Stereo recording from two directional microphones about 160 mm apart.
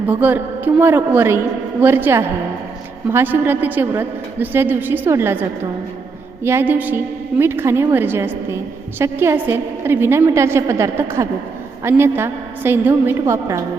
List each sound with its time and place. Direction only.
0.1 s a woman's voice: 10° right (ahead or behind)